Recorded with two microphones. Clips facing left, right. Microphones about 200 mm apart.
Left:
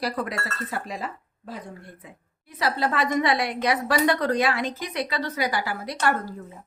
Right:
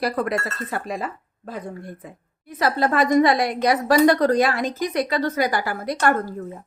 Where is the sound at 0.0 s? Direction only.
55° right (ahead or behind).